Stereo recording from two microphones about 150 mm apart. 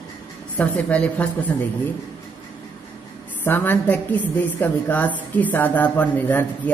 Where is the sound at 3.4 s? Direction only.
15° left (ahead or behind).